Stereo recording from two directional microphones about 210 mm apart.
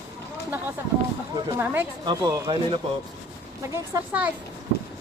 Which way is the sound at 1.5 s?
10° right (ahead or behind).